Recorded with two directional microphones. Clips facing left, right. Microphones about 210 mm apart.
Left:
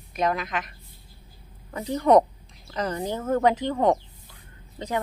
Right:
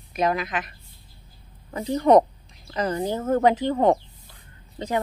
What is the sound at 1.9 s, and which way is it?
A woman's voice, 25° right (ahead or behind).